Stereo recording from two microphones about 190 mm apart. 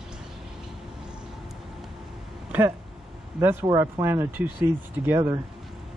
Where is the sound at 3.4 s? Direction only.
15° right (ahead or behind).